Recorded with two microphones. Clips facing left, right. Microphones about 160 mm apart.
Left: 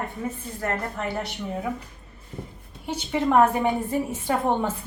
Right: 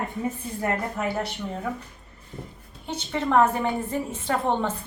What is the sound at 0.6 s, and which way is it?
Speech, 5° right (ahead or behind).